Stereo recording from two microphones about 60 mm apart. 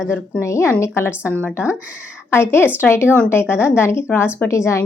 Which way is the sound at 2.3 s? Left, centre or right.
Left.